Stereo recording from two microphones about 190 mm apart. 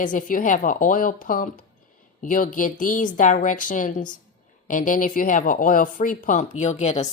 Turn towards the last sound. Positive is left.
turn(degrees=35)  # may be behind; listen again after turning